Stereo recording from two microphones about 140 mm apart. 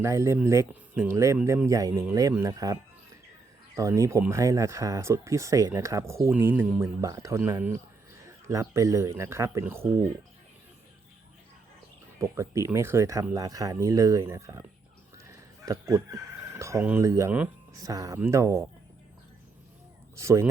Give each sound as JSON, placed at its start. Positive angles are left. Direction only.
{"t": 0.0, "sound": "speech", "side_deg": -20}
{"t": 3.8, "sound": "speech", "side_deg": -20}
{"t": 7.0, "sound": "speech", "side_deg": -25}
{"t": 12.2, "sound": "speech", "side_deg": -20}
{"t": 15.2, "sound": "chicken", "side_deg": -25}
{"t": 17.0, "sound": "speech", "side_deg": -20}
{"t": 20.2, "sound": "speech", "side_deg": -20}